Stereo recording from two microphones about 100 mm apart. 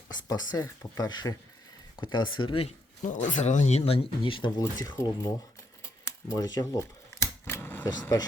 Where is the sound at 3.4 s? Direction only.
90° left; by 4.5 s 60° left (ahead or behind).